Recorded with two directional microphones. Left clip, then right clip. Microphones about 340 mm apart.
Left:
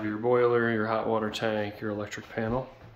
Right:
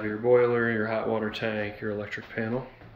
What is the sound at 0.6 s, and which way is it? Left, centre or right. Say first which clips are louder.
Speech: even; left.